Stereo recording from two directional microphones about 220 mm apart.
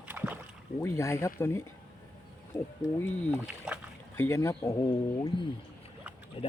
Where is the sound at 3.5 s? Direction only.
5° right (ahead or behind).